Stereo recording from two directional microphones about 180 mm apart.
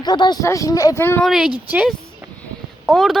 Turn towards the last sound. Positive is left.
turn(degrees=0)  # may be behind; listen again after turning